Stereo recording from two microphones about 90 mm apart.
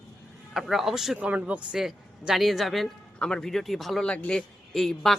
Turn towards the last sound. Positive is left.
turn(degrees=5)  # may be behind; listen again after turning